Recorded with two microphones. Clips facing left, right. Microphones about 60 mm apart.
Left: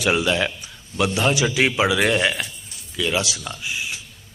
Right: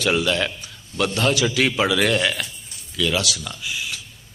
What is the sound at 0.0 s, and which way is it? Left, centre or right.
Speech, centre.